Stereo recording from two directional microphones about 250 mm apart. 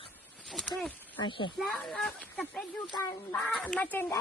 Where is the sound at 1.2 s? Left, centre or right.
Centre.